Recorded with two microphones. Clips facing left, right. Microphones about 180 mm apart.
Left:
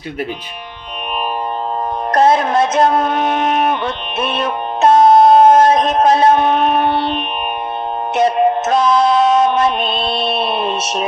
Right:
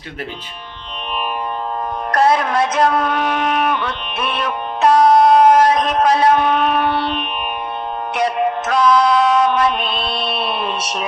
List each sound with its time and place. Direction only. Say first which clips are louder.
2.1 s speech: left 3 dB; 25° left (ahead or behind)
8.1 s music: left 5 dB; 25° left (ahead or behind)